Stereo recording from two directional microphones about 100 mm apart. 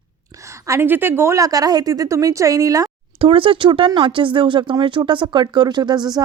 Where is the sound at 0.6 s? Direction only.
25° right (ahead or behind).